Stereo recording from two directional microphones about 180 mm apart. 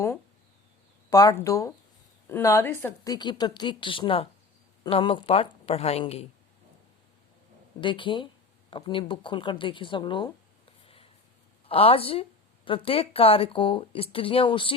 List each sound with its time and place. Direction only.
1.1 s speech: 20° left (ahead or behind); by 6.2 s 35° left (ahead or behind)
7.8 s speech: 25° left (ahead or behind)
10.8 s a sound: 30° left (ahead or behind)
11.7 s speech: 30° left (ahead or behind)